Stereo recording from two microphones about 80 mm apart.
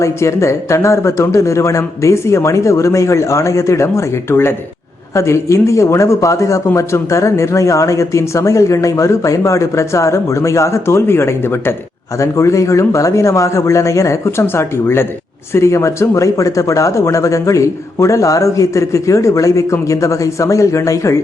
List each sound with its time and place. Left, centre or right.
0.0 s speech: left